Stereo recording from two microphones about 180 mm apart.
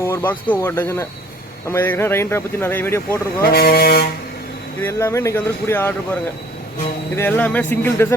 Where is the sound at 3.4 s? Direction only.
55° left (ahead or behind).